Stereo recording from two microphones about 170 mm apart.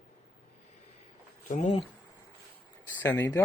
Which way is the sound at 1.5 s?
45° left (ahead or behind).